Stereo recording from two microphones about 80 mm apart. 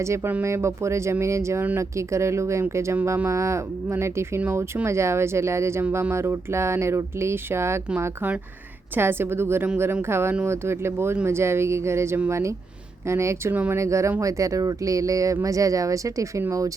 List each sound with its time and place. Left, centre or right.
0.4 s speech: right
4.4 s a woman's voice: right
4.9 s a woman's voice: right
13.5 s a woman's voice: right
13.7 s speech: right